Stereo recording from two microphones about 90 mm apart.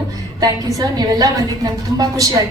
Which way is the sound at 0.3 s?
45° right (ahead or behind).